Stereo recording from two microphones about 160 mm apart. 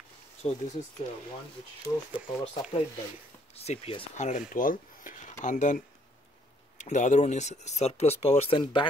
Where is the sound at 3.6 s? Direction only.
40° left (ahead or behind).